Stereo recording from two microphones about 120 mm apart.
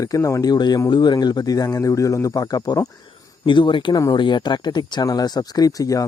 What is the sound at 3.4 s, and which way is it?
A man's voice, 40° left (ahead or behind).